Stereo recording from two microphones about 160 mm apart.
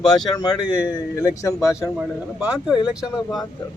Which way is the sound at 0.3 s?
25° left (ahead or behind).